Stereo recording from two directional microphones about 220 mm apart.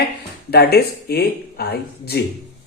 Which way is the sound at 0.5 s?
45° left (ahead or behind).